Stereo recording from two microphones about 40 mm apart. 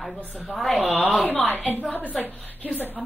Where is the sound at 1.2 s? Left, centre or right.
Left.